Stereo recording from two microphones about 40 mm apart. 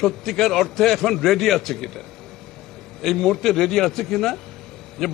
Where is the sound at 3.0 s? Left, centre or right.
Centre.